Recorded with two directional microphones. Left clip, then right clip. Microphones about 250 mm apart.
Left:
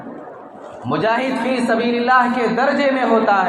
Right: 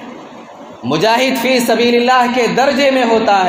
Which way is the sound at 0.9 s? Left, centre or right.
Right.